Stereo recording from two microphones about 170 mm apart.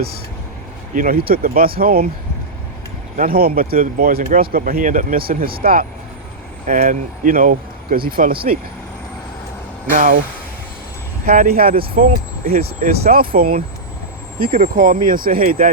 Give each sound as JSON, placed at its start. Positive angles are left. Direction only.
{"t": 0.9, "sound": "speech", "side_deg": -60}
{"t": 3.2, "sound": "speech", "side_deg": -60}
{"t": 9.9, "sound": "speech", "side_deg": -50}
{"t": 11.3, "sound": "speech", "side_deg": -60}